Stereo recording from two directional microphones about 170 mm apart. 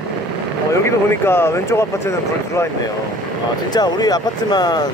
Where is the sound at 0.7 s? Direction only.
15° left (ahead or behind).